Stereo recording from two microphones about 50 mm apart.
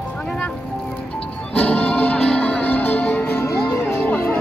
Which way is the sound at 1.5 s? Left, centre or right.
Left.